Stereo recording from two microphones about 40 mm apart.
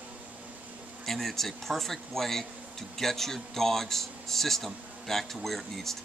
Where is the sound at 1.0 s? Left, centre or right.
Centre.